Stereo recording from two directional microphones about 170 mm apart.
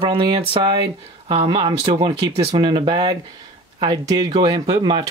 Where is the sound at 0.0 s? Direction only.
30° right (ahead or behind).